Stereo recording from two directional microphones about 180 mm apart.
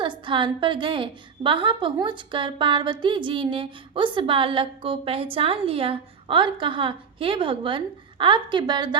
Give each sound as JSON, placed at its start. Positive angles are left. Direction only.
{"t": 0.0, "sound": "a woman's voice", "side_deg": -25}